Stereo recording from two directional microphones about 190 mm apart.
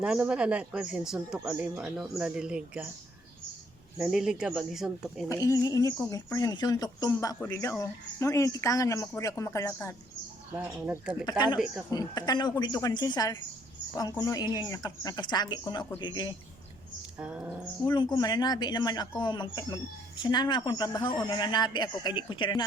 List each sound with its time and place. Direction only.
0.0 s speech: 5° right (ahead or behind)
4.0 s speech: 5° right (ahead or behind)
5.3 s speech: 20° left (ahead or behind)
10.5 s speech: 10° right (ahead or behind)
11.3 s speech: 20° left (ahead or behind)
17.2 s speech: 5° right (ahead or behind)
17.9 s speech: 20° left (ahead or behind)